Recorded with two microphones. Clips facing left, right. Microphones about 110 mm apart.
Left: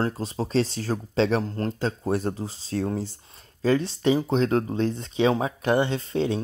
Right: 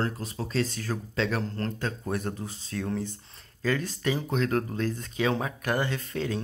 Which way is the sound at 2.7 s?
35° left (ahead or behind).